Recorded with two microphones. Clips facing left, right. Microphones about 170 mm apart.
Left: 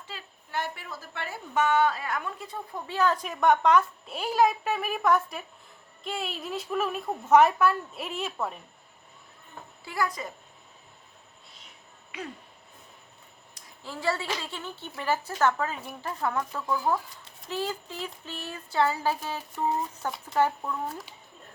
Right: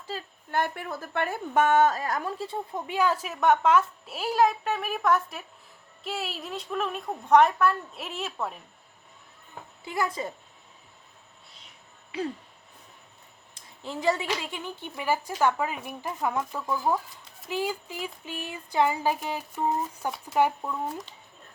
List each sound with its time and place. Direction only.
0.1 s a woman's voice: 45° right (ahead or behind); by 2.8 s 30° right (ahead or behind)
2.8 s a woman's voice: 15° right (ahead or behind)
9.8 s a woman's voice: 20° right (ahead or behind)
12.1 s a sound: 30° right (ahead or behind)
13.5 s a woman's voice: 20° right (ahead or behind)